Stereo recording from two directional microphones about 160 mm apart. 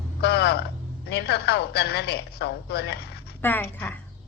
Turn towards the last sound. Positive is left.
turn(degrees=10)  # may be behind; listen again after turning